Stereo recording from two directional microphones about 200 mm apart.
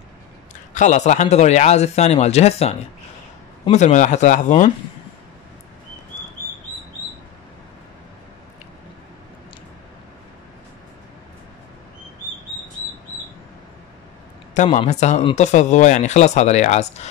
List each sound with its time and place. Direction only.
0.7 s speech: 35° left (ahead or behind)
14.5 s speech: 35° left (ahead or behind)